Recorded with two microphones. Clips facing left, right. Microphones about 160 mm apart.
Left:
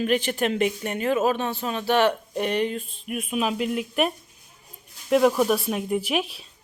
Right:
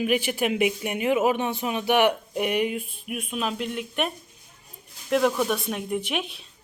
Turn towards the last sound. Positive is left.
turn(degrees=0)  # may be behind; listen again after turning